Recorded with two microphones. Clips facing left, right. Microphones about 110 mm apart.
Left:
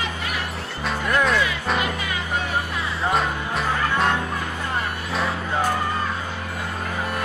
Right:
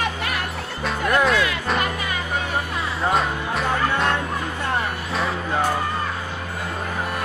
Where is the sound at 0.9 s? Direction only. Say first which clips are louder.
Right 2 dB; centre (ahead or behind).